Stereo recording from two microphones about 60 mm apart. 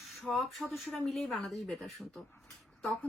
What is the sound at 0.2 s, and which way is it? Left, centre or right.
A woman's voice, centre.